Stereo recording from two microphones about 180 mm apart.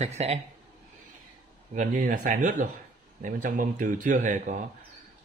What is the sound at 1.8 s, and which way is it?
Speech, 45° right (ahead or behind).